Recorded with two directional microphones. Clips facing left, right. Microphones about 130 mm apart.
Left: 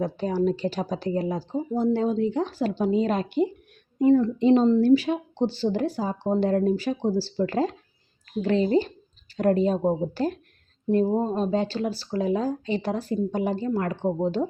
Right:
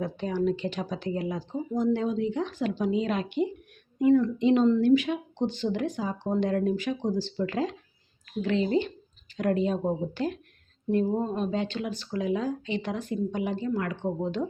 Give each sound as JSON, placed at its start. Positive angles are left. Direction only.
{"t": 0.0, "sound": "speech", "side_deg": 35}